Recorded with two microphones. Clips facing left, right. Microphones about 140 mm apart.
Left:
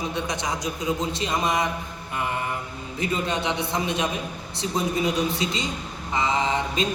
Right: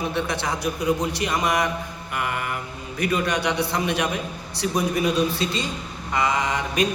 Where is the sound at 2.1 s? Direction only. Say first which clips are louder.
Even; 25° left (ahead or behind).